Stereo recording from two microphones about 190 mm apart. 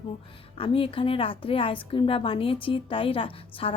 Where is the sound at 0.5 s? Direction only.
30° left (ahead or behind).